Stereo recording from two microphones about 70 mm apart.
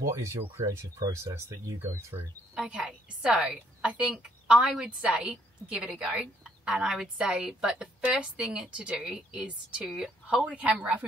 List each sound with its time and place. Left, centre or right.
0.0 s speech: right
2.6 s a sound: centre
3.2 s a woman's voice: centre
10.2 s a woman's voice: centre